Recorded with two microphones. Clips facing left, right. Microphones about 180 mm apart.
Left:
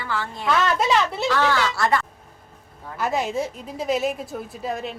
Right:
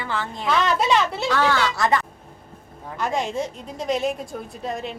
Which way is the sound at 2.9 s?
5° left (ahead or behind).